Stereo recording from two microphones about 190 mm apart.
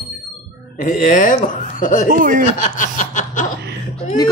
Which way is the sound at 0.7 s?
45° left (ahead or behind).